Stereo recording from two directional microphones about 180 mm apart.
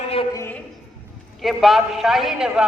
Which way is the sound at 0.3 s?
10° left (ahead or behind).